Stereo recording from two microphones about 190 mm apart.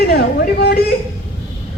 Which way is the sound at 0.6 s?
55° left (ahead or behind).